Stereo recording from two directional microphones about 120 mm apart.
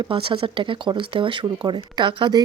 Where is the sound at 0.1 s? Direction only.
45° right (ahead or behind).